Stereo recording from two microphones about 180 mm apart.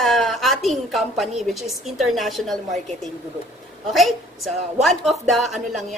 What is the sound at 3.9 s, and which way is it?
A woman's voice, centre (ahead or behind).